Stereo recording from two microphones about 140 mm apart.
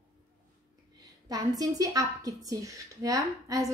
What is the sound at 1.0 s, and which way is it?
A woman's voice, 25° right (ahead or behind).